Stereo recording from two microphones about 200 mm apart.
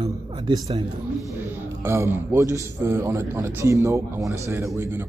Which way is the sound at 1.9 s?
15° right (ahead or behind).